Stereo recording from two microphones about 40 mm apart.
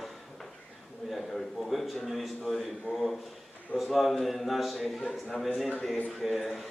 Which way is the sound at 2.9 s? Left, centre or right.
Left.